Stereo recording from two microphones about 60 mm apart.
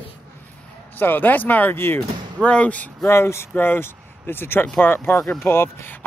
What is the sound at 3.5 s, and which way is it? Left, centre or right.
A man's voice, left.